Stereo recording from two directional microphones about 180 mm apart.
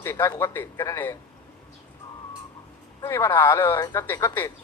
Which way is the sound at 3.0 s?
15° left (ahead or behind).